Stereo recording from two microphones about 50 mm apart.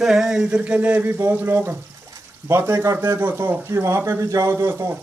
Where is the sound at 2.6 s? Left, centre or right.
Right.